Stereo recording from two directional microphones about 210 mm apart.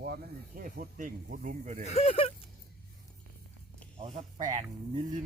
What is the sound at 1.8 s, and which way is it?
Speech, 30° left (ahead or behind).